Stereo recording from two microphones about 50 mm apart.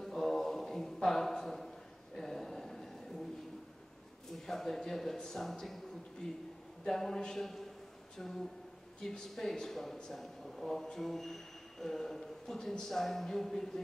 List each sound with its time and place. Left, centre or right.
0.0 s a sound: centre
4.3 s a man's voice: centre
9.0 s speech: centre